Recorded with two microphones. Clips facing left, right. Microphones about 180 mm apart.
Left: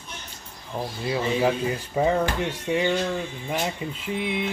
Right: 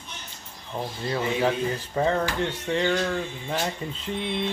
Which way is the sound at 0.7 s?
10° left (ahead or behind).